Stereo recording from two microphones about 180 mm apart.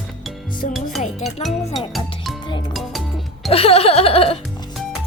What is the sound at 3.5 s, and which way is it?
Music, 35° left (ahead or behind).